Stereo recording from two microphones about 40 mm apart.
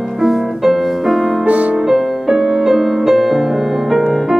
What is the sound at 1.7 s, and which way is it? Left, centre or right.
Music, centre.